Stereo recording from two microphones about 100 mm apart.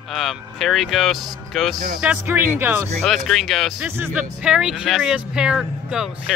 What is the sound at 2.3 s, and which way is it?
Speech, 20° right (ahead or behind).